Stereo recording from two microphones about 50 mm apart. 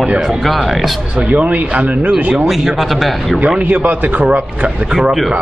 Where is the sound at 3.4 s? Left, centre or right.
Right.